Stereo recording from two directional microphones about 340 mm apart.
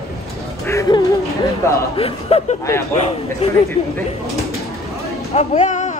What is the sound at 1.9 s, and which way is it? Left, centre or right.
Speech, centre.